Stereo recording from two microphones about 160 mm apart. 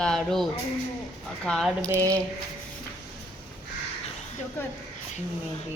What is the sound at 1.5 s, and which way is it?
Speech, centre (ahead or behind).